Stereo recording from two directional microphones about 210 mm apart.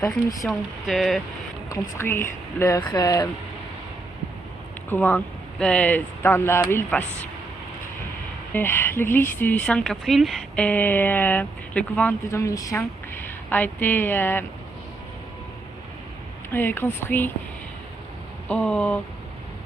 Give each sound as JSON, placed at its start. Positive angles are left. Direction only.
{"t": 0.4, "sound": "speech", "side_deg": 0}
{"t": 1.7, "sound": "speech", "side_deg": 10}
{"t": 4.9, "sound": "speech", "side_deg": 10}
{"t": 8.5, "sound": "speech", "side_deg": 10}
{"t": 16.5, "sound": "speech", "side_deg": 10}
{"t": 18.4, "sound": "speech", "side_deg": 5}